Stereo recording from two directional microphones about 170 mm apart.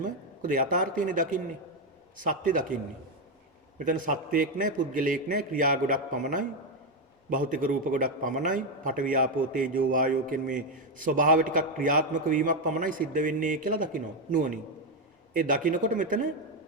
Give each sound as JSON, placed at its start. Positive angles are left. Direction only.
{"t": 0.0, "sound": "a man's voice", "side_deg": -50}
{"t": 3.8, "sound": "a man's voice", "side_deg": -50}